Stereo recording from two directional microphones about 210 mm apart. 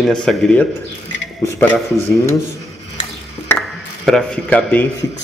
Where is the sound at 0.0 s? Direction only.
5° left (ahead or behind).